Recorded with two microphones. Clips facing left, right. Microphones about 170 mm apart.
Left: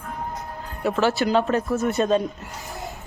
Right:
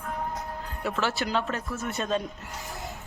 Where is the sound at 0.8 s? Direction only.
45° left (ahead or behind).